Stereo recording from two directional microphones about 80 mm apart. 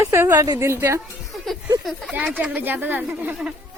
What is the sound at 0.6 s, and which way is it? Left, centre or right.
Speech, right.